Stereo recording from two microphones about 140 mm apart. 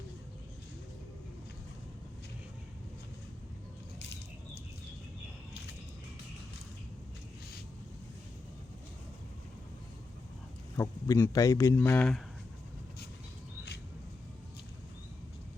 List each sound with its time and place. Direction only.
10.8 s a man's voice: 20° left (ahead or behind)